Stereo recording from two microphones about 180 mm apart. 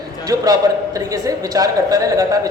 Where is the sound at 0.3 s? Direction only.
20° right (ahead or behind).